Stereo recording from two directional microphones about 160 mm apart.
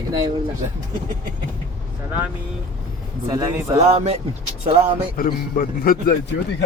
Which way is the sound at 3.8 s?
40° right (ahead or behind).